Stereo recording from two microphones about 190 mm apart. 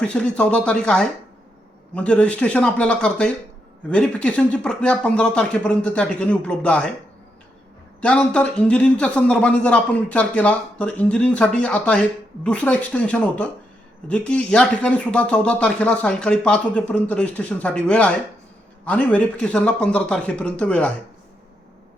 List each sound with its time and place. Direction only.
0.0 s speech: 5° left (ahead or behind)
8.0 s speech: 5° left (ahead or behind)